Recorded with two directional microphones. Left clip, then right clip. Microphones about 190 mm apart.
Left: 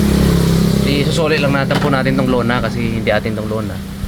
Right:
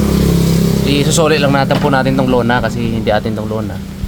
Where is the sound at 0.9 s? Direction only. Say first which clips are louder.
Right 5 dB; 35° right (ahead or behind); by 3.3 s 20° right (ahead or behind).